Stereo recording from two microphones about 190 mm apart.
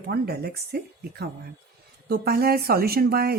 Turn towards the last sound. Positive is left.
turn(degrees=-55)  # may be behind; listen again after turning